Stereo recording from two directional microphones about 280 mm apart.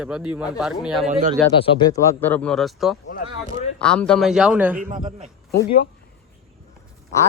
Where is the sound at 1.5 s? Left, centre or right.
Centre.